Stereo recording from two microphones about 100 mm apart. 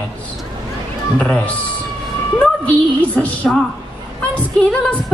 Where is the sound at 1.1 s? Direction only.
15° left (ahead or behind).